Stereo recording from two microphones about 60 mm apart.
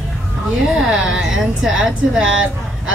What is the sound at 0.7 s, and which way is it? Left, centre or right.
A woman's voice, centre.